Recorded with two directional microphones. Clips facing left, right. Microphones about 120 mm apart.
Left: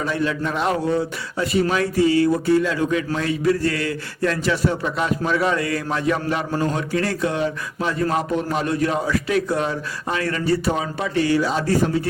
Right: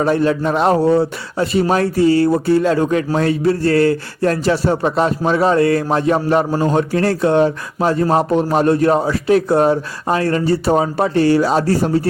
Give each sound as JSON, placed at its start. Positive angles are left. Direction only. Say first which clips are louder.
{"t": 0.2, "sound": "a man's voice", "louder": "right 7 dB", "side_deg": -35}